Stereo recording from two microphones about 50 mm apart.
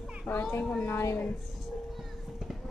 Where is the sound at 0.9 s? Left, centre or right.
Left.